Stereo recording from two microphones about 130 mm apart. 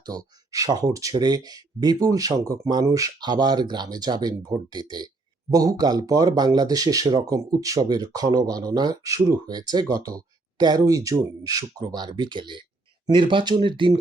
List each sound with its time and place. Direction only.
0.0 s speech: 30° right (ahead or behind)